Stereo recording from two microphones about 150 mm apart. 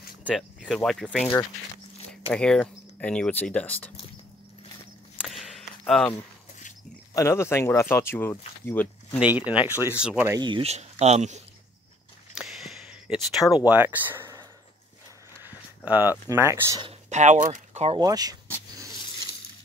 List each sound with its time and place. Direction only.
0.2 s speech: 5° right (ahead or behind)
2.3 s speech: 5° left (ahead or behind)
5.3 s basketball bounce: centre (ahead or behind)
7.2 s speech: 20° left (ahead or behind)
9.2 s speech: 10° right (ahead or behind)
10.4 s speech: 35° right (ahead or behind)
10.7 s speech: 45° right (ahead or behind)
12.4 s a sound: centre (ahead or behind)
13.7 s speech: 10° right (ahead or behind)
15.9 s speech: 15° right (ahead or behind)
17.1 s speech: 55° right (ahead or behind)
17.9 s speech: 25° right (ahead or behind)